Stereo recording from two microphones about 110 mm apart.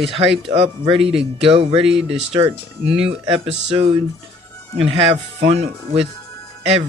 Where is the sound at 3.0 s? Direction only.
55° right (ahead or behind).